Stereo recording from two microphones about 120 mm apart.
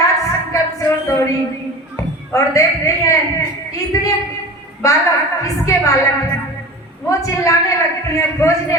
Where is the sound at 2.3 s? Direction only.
25° left (ahead or behind).